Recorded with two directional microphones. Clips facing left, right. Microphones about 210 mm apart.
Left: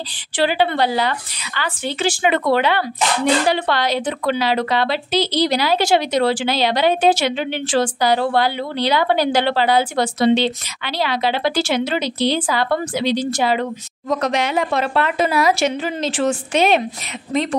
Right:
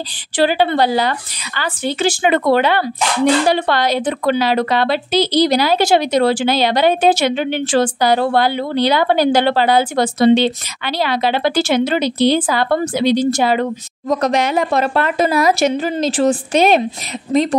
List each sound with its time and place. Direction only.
0.4 s a woman's voice: 45° right (ahead or behind)